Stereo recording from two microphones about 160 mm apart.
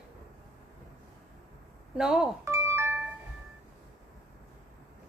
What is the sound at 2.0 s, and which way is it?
Speech, 5° right (ahead or behind).